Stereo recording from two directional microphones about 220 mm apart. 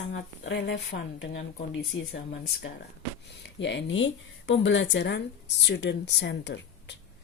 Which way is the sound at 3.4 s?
55° left (ahead or behind).